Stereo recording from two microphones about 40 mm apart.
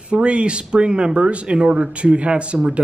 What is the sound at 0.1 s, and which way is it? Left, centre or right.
Speech, right.